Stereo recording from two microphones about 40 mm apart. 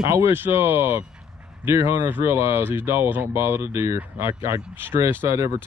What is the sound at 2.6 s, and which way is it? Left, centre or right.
Speech, right.